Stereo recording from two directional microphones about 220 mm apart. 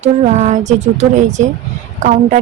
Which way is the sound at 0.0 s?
30° right (ahead or behind).